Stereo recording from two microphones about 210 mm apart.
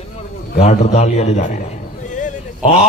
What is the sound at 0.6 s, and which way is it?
Speech, 30° left (ahead or behind).